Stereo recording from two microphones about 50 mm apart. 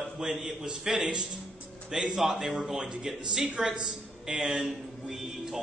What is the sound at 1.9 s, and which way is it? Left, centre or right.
A man's voice, centre.